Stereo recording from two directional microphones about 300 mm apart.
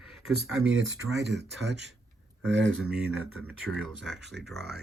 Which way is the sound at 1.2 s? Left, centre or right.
Right.